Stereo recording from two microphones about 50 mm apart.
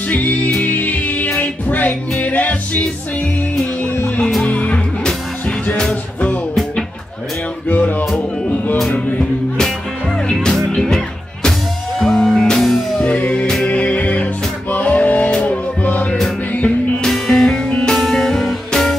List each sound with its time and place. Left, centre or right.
0.1 s music: left
4.5 s music: left
7.6 s music: left
10.4 s music: centre
12.0 s music: centre
13.0 s music: left
17.1 s music: centre
17.6 s music: left
17.9 s music: centre